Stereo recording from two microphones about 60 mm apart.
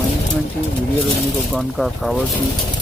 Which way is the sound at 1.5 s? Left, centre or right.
Centre.